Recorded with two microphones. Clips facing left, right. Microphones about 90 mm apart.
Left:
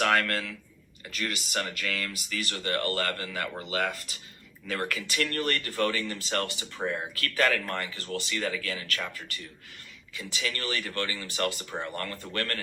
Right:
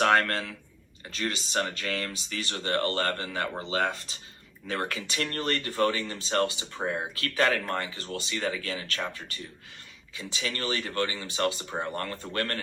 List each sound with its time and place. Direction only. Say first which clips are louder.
0.0 s speech: right 2 dB; 35° right (ahead or behind)